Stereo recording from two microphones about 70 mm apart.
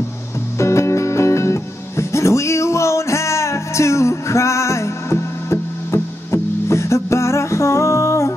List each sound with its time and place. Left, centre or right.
0.6 s music: left